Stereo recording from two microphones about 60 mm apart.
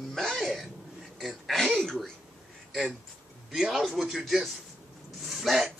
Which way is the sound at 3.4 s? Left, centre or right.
Centre.